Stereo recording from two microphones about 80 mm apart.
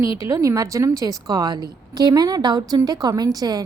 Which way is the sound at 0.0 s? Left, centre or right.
Right.